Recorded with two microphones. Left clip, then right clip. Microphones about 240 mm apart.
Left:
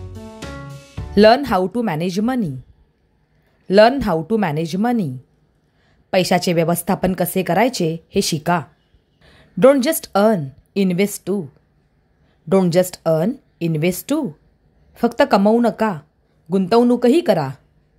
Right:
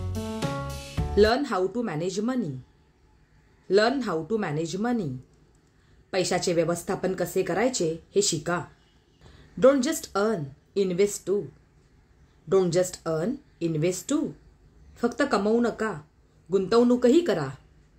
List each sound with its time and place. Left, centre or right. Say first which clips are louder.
1.1 s a woman's voice: left 10 dB; left
3.6 s a woman's voice: left 10 dB; left
12.4 s a woman's voice: left 7 dB; left